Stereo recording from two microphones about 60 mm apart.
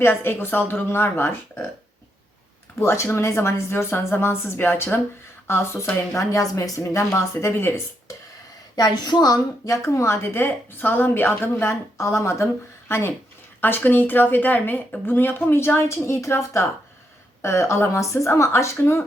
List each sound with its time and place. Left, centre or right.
0.0 s a woman's voice: left
2.7 s a woman's voice: left
6.3 s a woman's voice: left
7.3 s a woman's voice: left
9.2 s speech: left
9.8 s a woman's voice: left
13.6 s a woman's voice: left